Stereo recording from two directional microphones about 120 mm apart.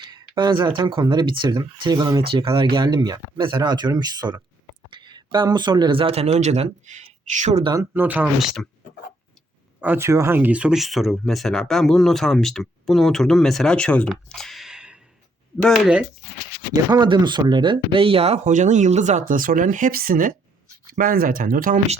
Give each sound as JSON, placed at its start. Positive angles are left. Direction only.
{"t": 0.0, "sound": "speech", "side_deg": -40}
{"t": 7.6, "sound": "speech", "side_deg": -30}
{"t": 7.9, "sound": "speech", "side_deg": -15}
{"t": 8.4, "sound": "speech", "side_deg": 0}
{"t": 9.8, "sound": "speech", "side_deg": -20}
{"t": 15.5, "sound": "speech", "side_deg": 5}
{"t": 16.7, "sound": "speech", "side_deg": -40}
{"t": 18.4, "sound": "speech", "side_deg": -85}